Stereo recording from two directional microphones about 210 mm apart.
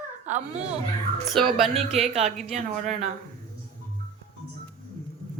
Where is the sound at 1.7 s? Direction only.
30° right (ahead or behind).